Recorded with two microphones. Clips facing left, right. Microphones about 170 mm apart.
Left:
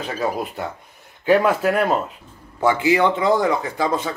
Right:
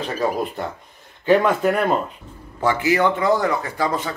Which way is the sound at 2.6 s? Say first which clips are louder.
Left 1 dB; 15° left (ahead or behind).